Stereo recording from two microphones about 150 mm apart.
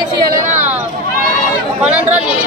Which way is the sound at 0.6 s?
10° right (ahead or behind).